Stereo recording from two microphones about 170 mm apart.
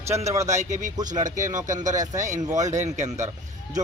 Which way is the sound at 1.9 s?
20° right (ahead or behind).